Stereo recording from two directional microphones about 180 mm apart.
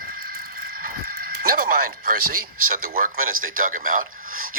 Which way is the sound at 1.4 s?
55° right (ahead or behind).